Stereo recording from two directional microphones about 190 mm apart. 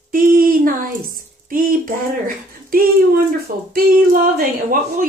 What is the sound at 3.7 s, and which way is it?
Speech, 50° right (ahead or behind).